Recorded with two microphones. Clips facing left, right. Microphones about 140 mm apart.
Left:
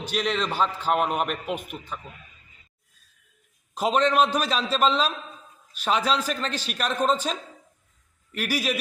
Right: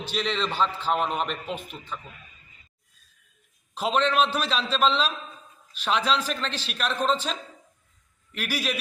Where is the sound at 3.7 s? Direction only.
10° left (ahead or behind).